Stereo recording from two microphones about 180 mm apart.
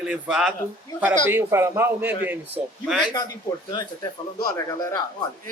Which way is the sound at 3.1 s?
20° left (ahead or behind).